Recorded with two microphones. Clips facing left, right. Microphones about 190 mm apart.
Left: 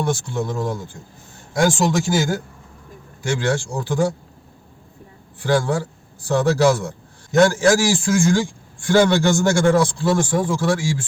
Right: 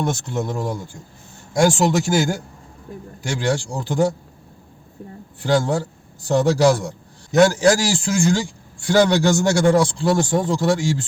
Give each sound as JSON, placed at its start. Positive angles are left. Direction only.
{"t": 0.0, "sound": "a man's voice", "side_deg": -20}
{"t": 5.4, "sound": "a man's voice", "side_deg": -15}